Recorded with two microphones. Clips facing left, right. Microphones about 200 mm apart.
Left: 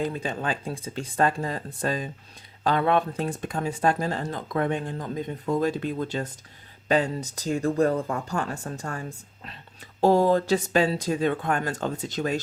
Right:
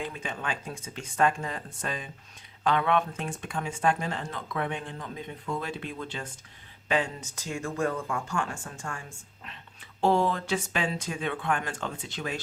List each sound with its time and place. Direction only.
0.0 s speech: 35° left (ahead or behind)